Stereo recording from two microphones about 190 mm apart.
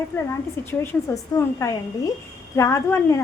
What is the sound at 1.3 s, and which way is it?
A woman's voice, 15° left (ahead or behind).